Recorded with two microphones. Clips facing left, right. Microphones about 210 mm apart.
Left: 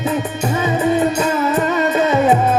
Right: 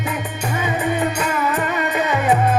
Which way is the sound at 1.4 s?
25° left (ahead or behind).